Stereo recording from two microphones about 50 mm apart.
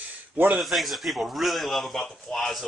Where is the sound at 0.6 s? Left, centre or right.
Centre.